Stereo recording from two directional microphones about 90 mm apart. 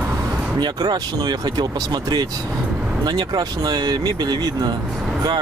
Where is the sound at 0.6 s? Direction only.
50° right (ahead or behind).